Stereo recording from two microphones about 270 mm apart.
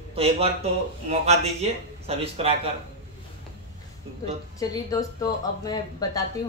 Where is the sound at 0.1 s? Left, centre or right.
Right.